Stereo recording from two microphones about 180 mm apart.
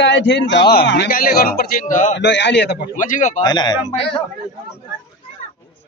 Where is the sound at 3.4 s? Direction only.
25° left (ahead or behind).